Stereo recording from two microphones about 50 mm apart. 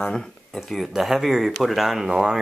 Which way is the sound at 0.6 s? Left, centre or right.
Centre.